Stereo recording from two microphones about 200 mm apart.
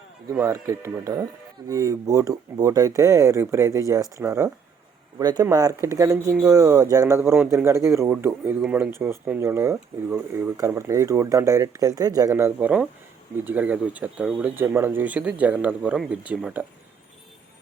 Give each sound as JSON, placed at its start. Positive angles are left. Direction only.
{"t": 0.3, "sound": "speech", "side_deg": -15}